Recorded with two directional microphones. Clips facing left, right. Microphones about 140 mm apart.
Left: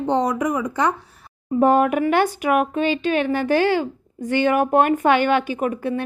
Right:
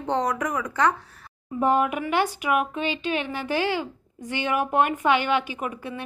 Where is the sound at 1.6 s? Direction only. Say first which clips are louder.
Left 6 dB; 45° left (ahead or behind).